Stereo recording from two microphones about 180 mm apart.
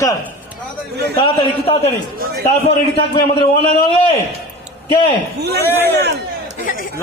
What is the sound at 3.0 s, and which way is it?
Speech, 25° left (ahead or behind).